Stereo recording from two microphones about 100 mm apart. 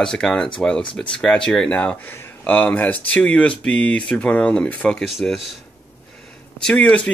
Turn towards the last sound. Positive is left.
turn(degrees=15)  # may be behind; listen again after turning